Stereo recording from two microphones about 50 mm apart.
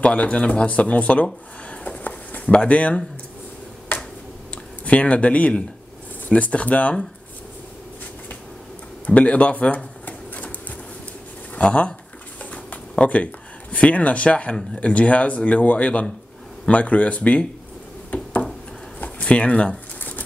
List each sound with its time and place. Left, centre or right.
0.0 s speech: left
4.8 s speech: left
9.0 s speech: left
10.0 s sewing machine: left
11.5 s speech: left
12.4 s a sound: left
12.9 s speech: left
18.1 s a sound: left
20.0 s patter: left